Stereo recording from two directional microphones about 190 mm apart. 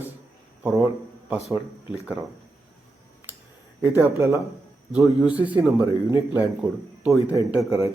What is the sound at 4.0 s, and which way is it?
A man's voice, 15° right (ahead or behind).